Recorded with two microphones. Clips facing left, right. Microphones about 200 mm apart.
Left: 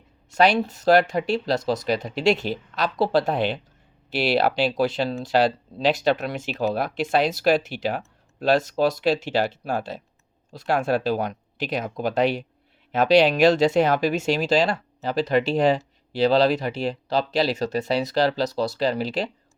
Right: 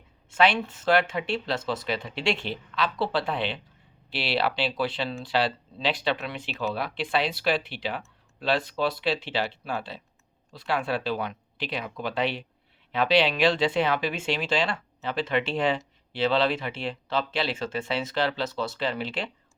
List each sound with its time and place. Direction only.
0.3 s speech: 40° left (ahead or behind)